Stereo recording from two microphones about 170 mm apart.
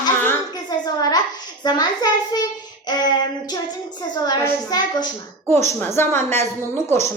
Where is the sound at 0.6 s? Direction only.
25° left (ahead or behind).